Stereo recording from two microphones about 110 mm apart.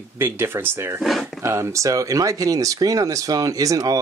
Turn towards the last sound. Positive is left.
turn(degrees=-30)  # may be behind; listen again after turning